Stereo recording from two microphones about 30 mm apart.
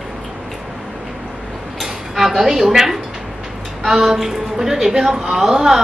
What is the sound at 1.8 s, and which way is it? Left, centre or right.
Dishes, centre.